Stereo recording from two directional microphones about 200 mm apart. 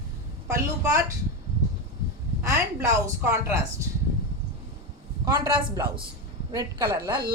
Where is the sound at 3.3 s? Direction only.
15° right (ahead or behind).